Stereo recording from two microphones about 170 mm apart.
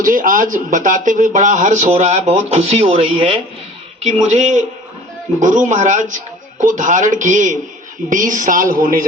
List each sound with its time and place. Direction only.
0.0 s speech: 50° right (ahead or behind)